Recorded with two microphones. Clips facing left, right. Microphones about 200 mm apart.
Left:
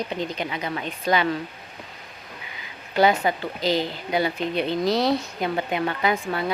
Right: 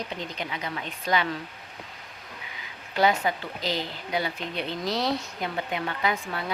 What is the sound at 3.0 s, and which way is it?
Speech, 70° left (ahead or behind).